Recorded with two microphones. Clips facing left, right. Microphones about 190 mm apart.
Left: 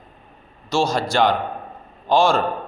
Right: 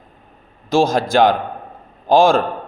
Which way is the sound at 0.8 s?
90° right.